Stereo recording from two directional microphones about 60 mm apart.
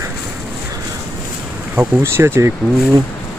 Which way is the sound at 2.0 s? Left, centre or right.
Right.